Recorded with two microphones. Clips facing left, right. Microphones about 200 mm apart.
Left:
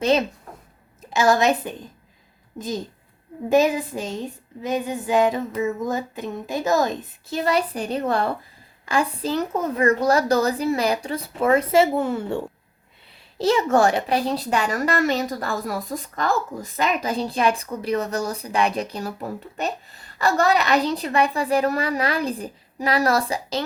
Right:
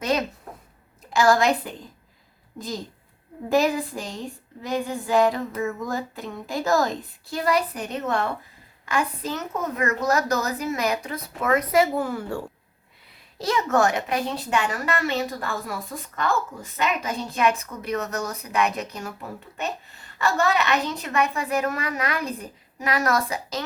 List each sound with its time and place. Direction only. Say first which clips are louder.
0.0 s a woman's voice: left 5 dB; 25° left (ahead or behind)